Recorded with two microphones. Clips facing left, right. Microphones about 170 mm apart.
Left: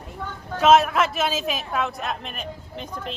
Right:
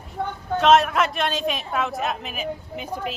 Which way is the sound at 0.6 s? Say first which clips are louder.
Left 1 dB; centre (ahead or behind).